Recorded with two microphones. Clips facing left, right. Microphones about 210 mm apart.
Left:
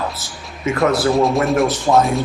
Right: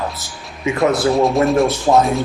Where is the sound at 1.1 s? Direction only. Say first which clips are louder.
Right 1 dB; centre (ahead or behind).